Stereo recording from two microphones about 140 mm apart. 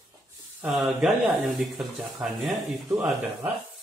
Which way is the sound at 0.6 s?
Centre (ahead or behind).